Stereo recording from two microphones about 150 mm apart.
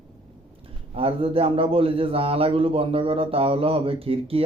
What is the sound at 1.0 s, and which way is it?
A man's voice, 40° right (ahead or behind).